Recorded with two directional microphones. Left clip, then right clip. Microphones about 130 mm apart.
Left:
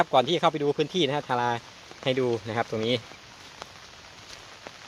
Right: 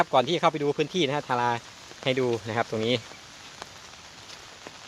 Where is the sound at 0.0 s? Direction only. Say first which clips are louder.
Even; 10° left (ahead or behind).